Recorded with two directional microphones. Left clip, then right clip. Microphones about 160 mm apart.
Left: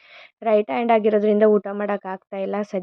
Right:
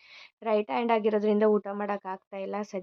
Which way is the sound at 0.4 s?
25° left (ahead or behind).